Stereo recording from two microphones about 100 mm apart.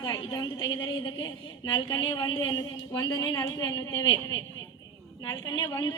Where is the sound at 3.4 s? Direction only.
35° left (ahead or behind).